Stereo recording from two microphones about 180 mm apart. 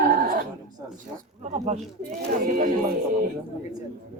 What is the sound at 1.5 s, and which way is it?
Speech, 35° right (ahead or behind).